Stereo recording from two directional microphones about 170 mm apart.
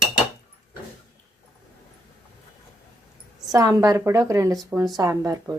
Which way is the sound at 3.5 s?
20° right (ahead or behind).